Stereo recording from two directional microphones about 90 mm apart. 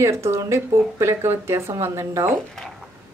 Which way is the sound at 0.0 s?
30° right (ahead or behind).